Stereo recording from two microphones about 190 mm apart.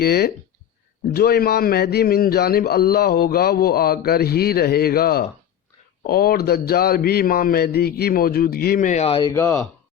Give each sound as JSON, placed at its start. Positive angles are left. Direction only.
{"t": 0.0, "sound": "a man's voice", "side_deg": 55}
{"t": 9.3, "sound": "speech", "side_deg": 15}